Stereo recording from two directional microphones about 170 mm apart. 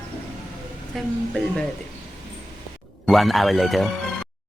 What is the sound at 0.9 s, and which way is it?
Speech, 5° left (ahead or behind).